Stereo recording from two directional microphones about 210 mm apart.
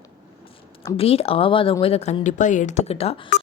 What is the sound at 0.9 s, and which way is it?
Speech, 30° left (ahead or behind).